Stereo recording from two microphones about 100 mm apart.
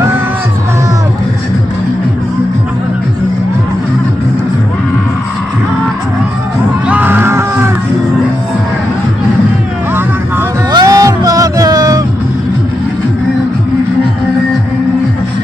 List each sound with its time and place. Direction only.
6.9 s music: 20° right (ahead or behind)
10.7 s music: 40° right (ahead or behind)